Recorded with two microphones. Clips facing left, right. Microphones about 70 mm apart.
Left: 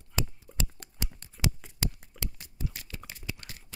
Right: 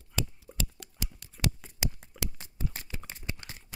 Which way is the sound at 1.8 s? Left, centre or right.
Centre.